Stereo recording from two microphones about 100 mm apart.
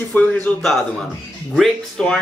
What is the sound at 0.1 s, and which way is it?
Speech, 15° left (ahead or behind).